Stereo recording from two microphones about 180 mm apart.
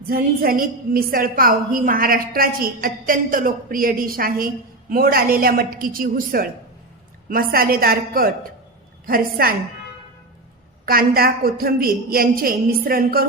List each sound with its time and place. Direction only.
0.0 s a woman's voice: 55° right (ahead or behind)
10.8 s a woman's voice: 55° right (ahead or behind)